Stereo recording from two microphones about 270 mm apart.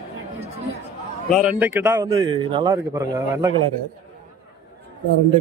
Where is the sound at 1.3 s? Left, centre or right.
Centre.